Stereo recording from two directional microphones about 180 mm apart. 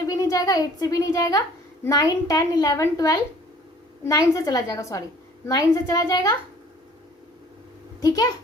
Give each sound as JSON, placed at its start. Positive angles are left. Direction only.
{"t": 0.0, "sound": "a woman's voice", "side_deg": 20}
{"t": 8.0, "sound": "a child's voice", "side_deg": 20}